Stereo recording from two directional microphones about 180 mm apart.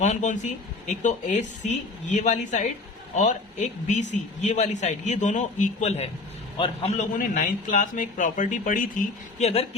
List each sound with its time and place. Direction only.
0.0 s a man's voice: 40° left (ahead or behind)